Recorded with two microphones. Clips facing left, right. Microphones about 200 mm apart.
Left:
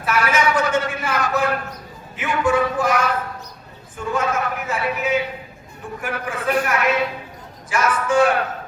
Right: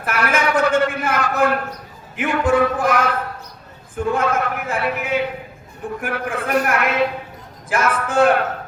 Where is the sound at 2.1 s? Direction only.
55° right (ahead or behind).